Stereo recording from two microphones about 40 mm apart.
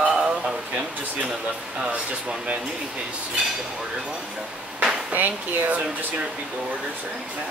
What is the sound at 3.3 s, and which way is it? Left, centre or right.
Speech, centre.